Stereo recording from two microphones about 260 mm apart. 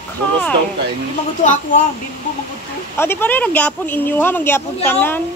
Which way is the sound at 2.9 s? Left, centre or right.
Centre.